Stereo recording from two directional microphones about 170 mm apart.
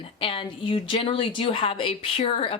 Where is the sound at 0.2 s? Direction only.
30° left (ahead or behind).